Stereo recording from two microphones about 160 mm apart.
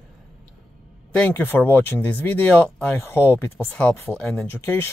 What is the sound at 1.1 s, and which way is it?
Speech, 10° left (ahead or behind).